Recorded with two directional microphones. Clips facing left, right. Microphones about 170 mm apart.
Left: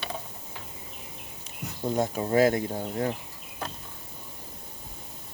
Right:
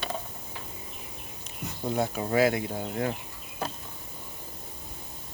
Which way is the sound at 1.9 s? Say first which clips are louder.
Left 2 dB; 40° left (ahead or behind).